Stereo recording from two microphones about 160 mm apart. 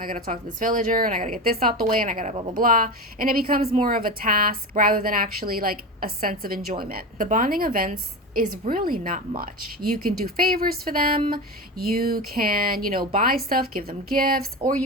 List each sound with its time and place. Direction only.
0.0 s speech: 55° right (ahead or behind)